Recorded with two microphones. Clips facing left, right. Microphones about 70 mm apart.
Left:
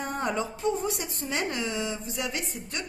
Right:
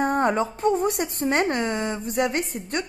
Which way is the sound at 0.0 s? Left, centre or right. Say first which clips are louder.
Right 8 dB; right.